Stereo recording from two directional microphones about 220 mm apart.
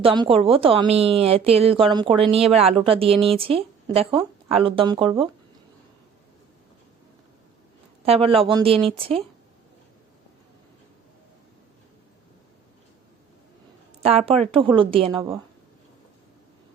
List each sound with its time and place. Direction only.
0.0 s a woman's voice: 25° right (ahead or behind)
8.0 s a woman's voice: 25° right (ahead or behind)
14.3 s a woman's voice: 25° right (ahead or behind)